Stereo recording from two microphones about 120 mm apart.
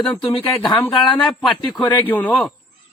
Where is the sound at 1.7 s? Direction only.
40° left (ahead or behind).